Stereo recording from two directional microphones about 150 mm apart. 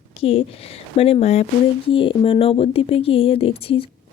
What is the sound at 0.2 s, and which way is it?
Speech, 40° left (ahead or behind).